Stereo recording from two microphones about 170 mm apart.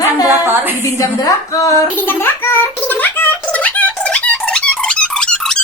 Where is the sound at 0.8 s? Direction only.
20° left (ahead or behind).